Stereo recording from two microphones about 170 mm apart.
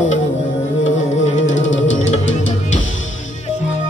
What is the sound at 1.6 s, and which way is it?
Music, 90° left.